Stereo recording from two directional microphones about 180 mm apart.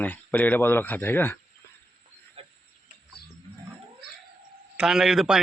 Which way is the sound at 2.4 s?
35° right (ahead or behind).